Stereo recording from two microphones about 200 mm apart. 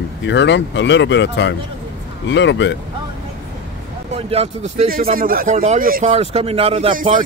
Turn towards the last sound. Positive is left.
turn(degrees=-30)  # may be behind; listen again after turning